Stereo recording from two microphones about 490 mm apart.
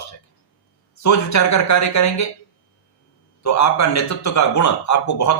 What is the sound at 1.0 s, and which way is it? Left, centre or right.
A man's voice, left.